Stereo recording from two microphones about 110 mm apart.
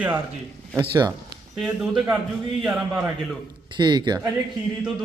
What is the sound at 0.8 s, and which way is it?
Speech, 40° right (ahead or behind).